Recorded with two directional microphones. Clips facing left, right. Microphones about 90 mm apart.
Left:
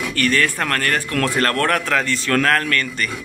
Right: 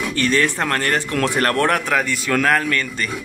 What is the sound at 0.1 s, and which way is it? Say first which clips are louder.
A man's voice: even; 20° right (ahead or behind).